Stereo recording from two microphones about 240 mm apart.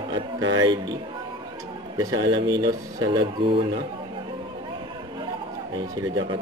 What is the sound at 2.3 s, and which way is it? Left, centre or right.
Speech, centre.